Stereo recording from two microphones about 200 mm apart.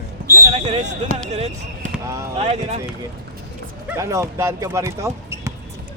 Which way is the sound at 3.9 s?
15° right (ahead or behind).